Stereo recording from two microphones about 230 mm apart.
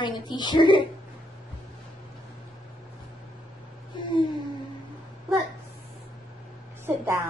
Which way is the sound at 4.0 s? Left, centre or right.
Centre.